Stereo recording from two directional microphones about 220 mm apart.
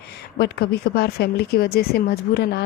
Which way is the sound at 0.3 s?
45° left (ahead or behind).